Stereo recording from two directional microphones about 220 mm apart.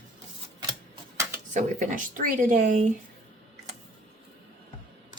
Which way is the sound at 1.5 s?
35° right (ahead or behind).